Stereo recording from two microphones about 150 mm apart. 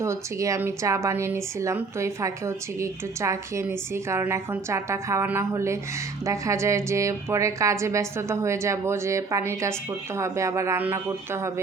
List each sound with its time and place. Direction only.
0.0 s speech: 20° right (ahead or behind)